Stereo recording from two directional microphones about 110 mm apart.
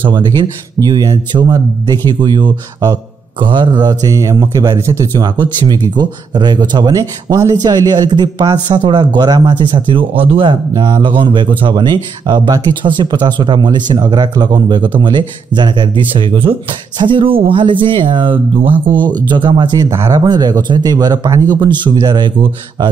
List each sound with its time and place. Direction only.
0.0 s speech: 45° right (ahead or behind); by 5.0 s 25° right (ahead or behind)
5.7 s speech: 40° right (ahead or behind)
10.7 s speech: 40° right (ahead or behind)
19.9 s speech: 25° right (ahead or behind)
20.2 s speech: 40° right (ahead or behind)